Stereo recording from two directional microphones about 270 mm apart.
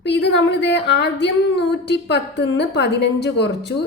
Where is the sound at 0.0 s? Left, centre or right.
Left.